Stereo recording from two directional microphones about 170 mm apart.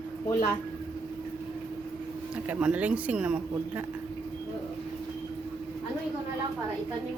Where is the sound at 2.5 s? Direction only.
5° right (ahead or behind).